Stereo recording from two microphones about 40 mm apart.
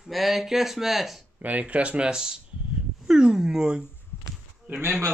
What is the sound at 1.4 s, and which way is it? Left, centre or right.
Speech, right.